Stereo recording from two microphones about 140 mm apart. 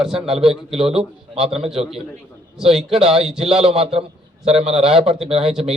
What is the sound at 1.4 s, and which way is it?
Speech, 45° right (ahead or behind).